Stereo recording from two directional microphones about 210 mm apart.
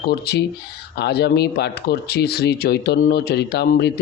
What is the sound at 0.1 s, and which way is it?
Speech, 50° left (ahead or behind).